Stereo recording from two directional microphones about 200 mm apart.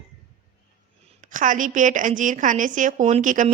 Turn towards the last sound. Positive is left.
turn(degrees=-40)  # may be behind; listen again after turning